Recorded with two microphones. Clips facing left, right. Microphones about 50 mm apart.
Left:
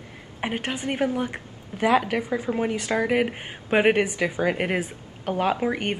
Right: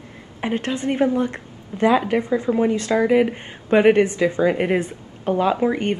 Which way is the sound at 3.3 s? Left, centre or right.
Centre.